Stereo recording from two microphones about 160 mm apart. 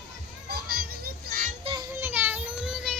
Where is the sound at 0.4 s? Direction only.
75° right (ahead or behind).